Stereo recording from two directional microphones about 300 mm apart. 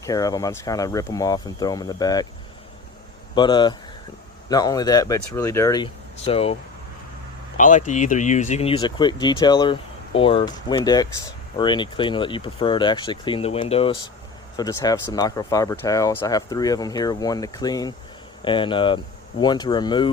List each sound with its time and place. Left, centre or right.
0.0 s speech: centre
3.3 s speech: centre